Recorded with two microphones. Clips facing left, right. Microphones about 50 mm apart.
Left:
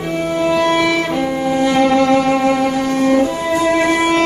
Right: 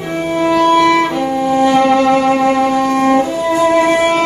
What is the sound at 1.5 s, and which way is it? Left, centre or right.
Music, centre.